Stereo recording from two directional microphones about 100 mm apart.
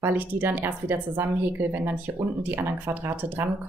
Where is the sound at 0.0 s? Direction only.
20° right (ahead or behind).